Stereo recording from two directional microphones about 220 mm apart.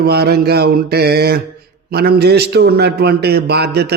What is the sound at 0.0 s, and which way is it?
A man's voice, 45° right (ahead or behind).